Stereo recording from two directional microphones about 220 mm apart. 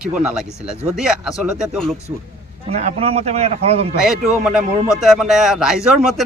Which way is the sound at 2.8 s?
30° right (ahead or behind).